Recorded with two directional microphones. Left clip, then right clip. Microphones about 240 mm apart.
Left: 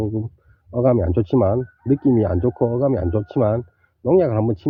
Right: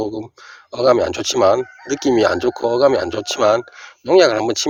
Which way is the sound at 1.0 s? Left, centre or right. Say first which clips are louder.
Right 4 dB; centre.